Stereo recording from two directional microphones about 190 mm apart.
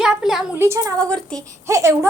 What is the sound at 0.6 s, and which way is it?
A woman's voice, 15° right (ahead or behind).